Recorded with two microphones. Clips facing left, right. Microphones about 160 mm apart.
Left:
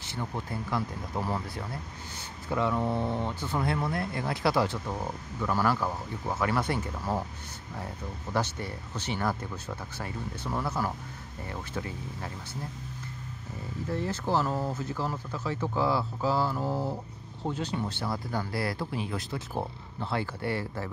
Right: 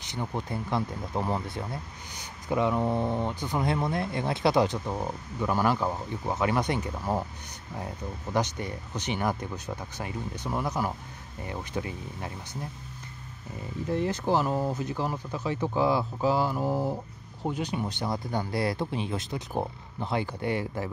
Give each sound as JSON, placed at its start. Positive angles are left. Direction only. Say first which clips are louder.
{"t": 0.0, "sound": "speech", "louder": "right 2 dB", "side_deg": -20}
{"t": 8.3, "sound": "speech", "louder": "right 2 dB", "side_deg": -15}
{"t": 13.8, "sound": "speech", "louder": "right 4 dB", "side_deg": -15}